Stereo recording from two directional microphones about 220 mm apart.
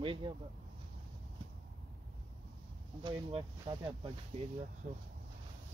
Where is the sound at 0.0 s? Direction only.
20° right (ahead or behind).